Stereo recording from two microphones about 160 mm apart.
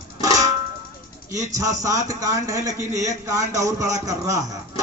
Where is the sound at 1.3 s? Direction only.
20° right (ahead or behind).